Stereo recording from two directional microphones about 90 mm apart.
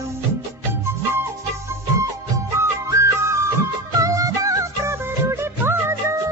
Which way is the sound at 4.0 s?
40° right (ahead or behind).